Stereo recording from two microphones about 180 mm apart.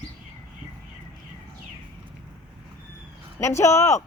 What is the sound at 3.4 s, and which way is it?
Speech, 15° left (ahead or behind).